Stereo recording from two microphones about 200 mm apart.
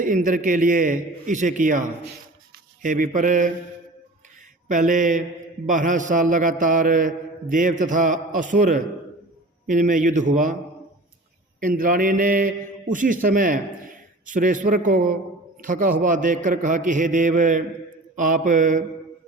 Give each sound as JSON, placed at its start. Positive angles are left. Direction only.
{"t": 0.0, "sound": "a man's voice", "side_deg": -40}
{"t": 2.8, "sound": "a man's voice", "side_deg": -40}
{"t": 4.7, "sound": "a man's voice", "side_deg": -40}
{"t": 11.6, "sound": "a man's voice", "side_deg": -45}